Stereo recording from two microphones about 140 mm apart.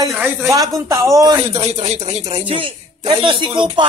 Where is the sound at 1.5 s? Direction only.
50° right (ahead or behind).